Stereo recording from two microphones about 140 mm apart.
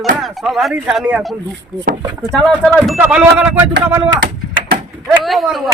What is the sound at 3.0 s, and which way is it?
Speech, 10° right (ahead or behind).